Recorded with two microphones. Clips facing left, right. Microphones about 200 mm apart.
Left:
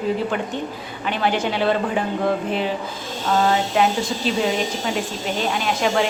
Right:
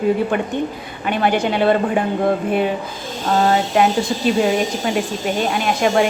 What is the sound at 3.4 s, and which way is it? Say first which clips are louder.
A woman's voice: right 4 dB; 50° right (ahead or behind).